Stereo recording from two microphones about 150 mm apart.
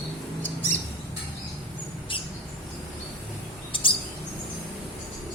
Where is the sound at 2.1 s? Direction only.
35° left (ahead or behind).